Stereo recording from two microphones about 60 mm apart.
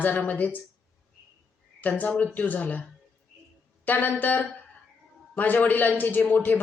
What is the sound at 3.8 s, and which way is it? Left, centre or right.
A woman's voice, left.